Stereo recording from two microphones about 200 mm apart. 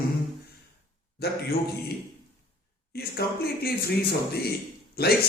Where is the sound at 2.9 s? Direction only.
50° left (ahead or behind).